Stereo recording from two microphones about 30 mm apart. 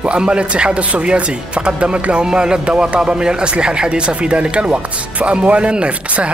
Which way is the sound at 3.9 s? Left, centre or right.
Right.